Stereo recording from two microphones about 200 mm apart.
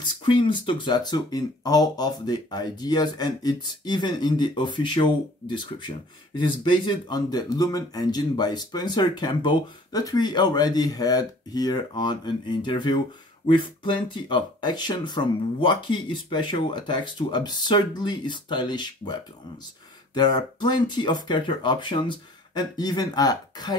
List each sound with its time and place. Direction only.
0.0 s speech: 25° left (ahead or behind)
20.2 s speech: 20° left (ahead or behind)